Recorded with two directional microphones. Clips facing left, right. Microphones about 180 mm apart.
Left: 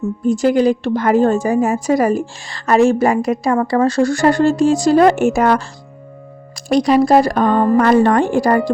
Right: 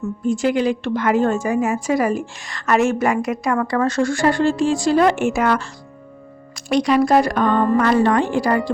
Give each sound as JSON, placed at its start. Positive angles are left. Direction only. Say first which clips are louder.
{"t": 0.3, "sound": "a woman's voice", "louder": "left 5 dB", "side_deg": 40}
{"t": 6.7, "sound": "a woman's voice", "louder": "left 4 dB", "side_deg": 35}